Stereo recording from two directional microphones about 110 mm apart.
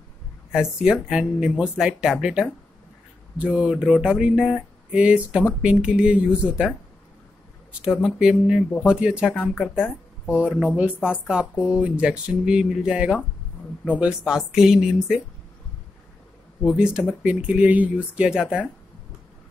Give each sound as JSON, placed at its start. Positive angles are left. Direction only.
{"t": 0.5, "sound": "speech", "side_deg": -5}
{"t": 7.8, "sound": "speech", "side_deg": -5}
{"t": 9.8, "sound": "music", "side_deg": 20}
{"t": 10.3, "sound": "speech", "side_deg": -10}
{"t": 16.6, "sound": "speech", "side_deg": -5}